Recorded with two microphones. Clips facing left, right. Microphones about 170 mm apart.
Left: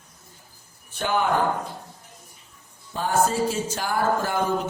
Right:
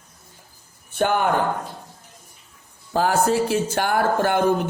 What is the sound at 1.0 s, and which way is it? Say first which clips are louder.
Speech: right 4 dB; 55° right (ahead or behind).